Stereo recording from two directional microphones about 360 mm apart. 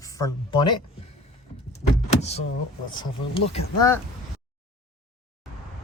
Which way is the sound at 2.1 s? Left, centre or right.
Centre.